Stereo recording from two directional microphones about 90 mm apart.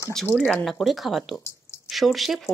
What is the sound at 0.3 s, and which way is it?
Speech, 20° left (ahead or behind).